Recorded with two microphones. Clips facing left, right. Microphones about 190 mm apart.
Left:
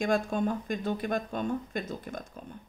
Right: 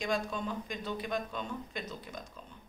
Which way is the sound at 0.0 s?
50° left (ahead or behind).